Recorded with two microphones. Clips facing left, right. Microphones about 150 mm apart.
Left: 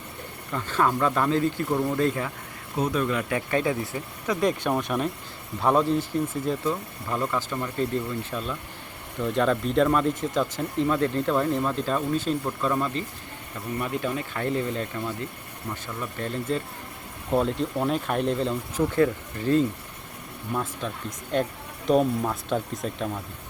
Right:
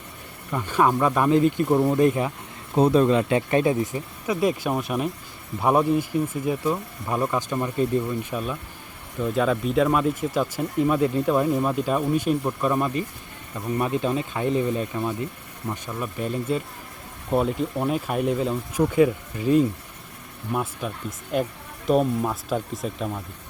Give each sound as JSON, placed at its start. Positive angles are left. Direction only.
{"t": 0.5, "sound": "speech", "side_deg": -15}
{"t": 2.7, "sound": "speech", "side_deg": -30}
{"t": 4.4, "sound": "speech", "side_deg": -5}